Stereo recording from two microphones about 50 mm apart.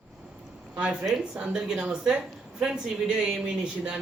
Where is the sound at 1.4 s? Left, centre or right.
Right.